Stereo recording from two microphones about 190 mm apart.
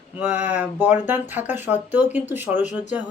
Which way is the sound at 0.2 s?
10° right (ahead or behind).